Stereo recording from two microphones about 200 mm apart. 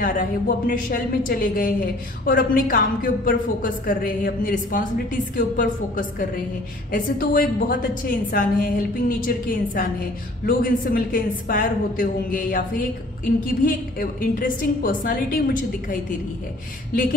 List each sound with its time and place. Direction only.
0.0 s a woman's voice: 45° left (ahead or behind)